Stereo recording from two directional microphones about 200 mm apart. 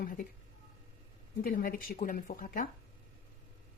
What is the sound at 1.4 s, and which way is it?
Speech, 45° left (ahead or behind).